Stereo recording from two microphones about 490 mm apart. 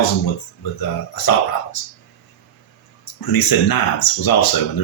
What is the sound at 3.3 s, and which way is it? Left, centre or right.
Speech, left.